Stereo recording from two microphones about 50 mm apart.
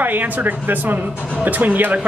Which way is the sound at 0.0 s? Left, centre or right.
Right.